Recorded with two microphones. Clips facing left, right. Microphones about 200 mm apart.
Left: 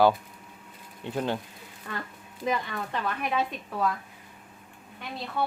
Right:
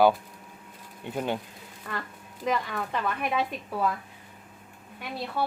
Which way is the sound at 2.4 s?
Centre (ahead or behind).